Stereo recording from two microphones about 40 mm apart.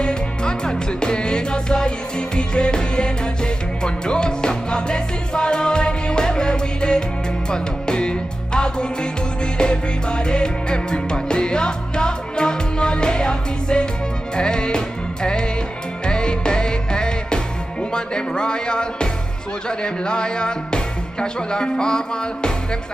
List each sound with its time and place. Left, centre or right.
0.0 s music: left
19.8 s speech: left